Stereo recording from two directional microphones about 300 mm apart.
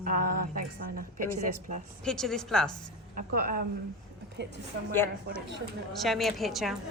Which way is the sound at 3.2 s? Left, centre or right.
Right.